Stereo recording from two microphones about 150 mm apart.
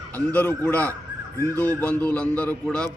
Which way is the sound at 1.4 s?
20° right (ahead or behind).